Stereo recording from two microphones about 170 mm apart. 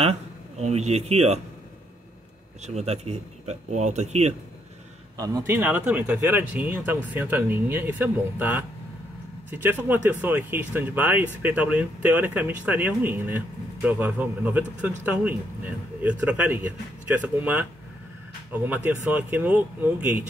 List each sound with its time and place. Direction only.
0.0 s speech: 40° right (ahead or behind)
2.6 s speech: 40° right (ahead or behind)
5.1 s a man's voice: 20° right (ahead or behind)
5.6 s speech: 10° right (ahead or behind)